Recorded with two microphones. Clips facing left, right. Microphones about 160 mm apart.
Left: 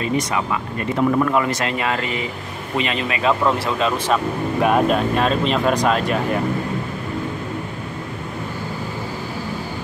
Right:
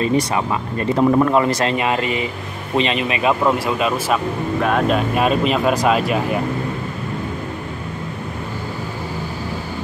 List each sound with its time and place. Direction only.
0.0 s speech: 35° right (ahead or behind)
1.8 s speech: 20° right (ahead or behind)
4.6 s speech: 5° left (ahead or behind)
5.1 s speech: 10° right (ahead or behind)